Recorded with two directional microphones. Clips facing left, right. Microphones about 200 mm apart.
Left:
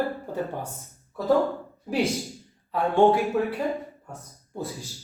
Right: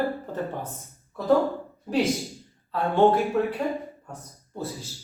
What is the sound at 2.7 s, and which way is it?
Speech, 15° left (ahead or behind).